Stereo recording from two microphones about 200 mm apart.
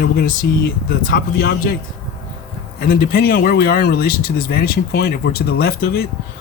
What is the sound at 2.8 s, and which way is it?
Speech, 50° left (ahead or behind).